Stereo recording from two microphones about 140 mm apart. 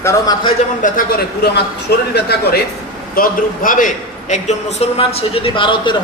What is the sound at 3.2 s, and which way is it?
A man's voice, 75° left (ahead or behind).